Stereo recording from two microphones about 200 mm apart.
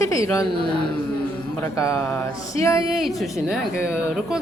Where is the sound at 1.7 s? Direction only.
15° left (ahead or behind).